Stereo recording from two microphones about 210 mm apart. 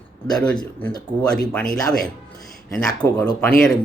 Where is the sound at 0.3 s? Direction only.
5° left (ahead or behind).